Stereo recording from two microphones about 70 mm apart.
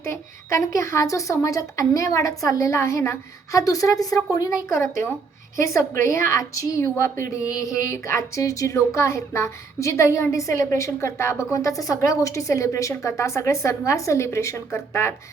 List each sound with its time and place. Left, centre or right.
0.0 s speech: left
3.6 s speech: left